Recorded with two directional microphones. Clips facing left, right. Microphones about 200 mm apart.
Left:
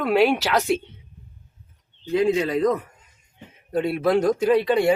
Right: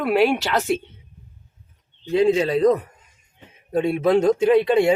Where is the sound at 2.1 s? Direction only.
30° right (ahead or behind).